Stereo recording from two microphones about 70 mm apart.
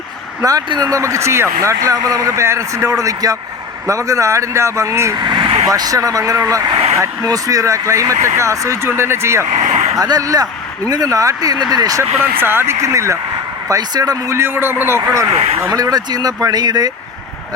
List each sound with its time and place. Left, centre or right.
0.4 s speech: right
5.1 s speech: right
5.6 s speech: right
8.9 s speech: right
10.0 s speech: right
12.2 s speech: right
13.7 s speech: right
14.3 s speech: right
15.7 s speech: right